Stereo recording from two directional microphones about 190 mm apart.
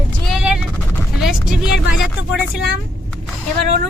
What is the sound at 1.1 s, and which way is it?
Vehicle, centre (ahead or behind).